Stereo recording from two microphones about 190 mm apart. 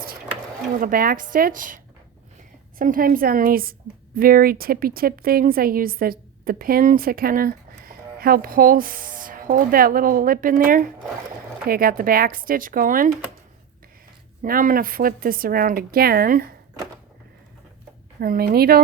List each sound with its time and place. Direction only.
0.8 s a woman's voice: 50° right (ahead or behind)
14.4 s a woman's voice: 45° right (ahead or behind)
18.2 s a woman's voice: 55° right (ahead or behind)